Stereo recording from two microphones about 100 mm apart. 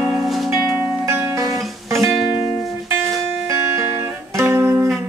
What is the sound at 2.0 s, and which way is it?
Music, centre (ahead or behind).